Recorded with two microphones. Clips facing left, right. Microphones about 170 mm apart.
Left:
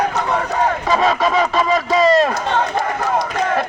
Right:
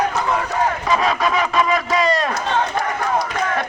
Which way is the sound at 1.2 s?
30° left (ahead or behind).